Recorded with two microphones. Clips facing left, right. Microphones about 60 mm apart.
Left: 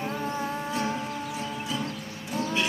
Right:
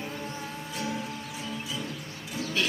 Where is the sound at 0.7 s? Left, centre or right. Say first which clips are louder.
Left 4 dB; left.